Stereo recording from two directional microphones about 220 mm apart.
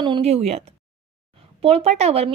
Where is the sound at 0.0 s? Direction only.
25° right (ahead or behind).